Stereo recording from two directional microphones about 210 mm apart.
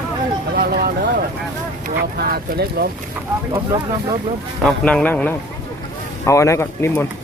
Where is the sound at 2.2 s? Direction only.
45° right (ahead or behind).